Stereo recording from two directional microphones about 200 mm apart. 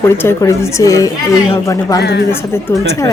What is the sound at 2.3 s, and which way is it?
Speech, 15° left (ahead or behind).